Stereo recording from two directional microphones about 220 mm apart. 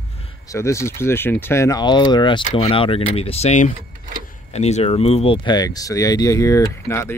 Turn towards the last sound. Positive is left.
turn(degrees=10)  # may be behind; listen again after turning